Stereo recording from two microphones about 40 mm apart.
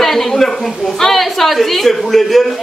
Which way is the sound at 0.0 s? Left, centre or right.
Centre.